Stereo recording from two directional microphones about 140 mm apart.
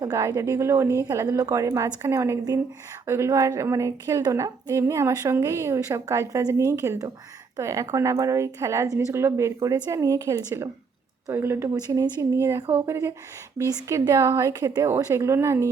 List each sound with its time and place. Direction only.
0.0 s a woman's voice: 25° right (ahead or behind)